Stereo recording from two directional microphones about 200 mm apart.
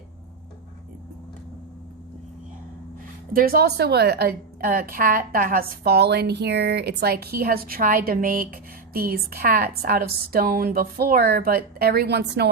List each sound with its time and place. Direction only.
3.3 s a woman's voice: 50° right (ahead or behind)